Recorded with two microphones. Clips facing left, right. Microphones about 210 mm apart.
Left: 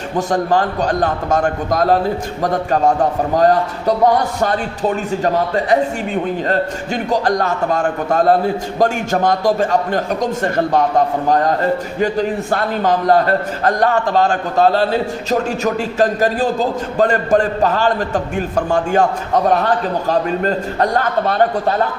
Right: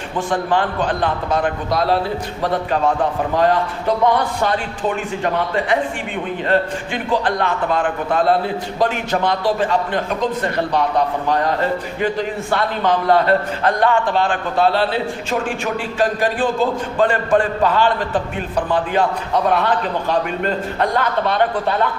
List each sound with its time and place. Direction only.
0.2 s a man's voice: 40° left (ahead or behind)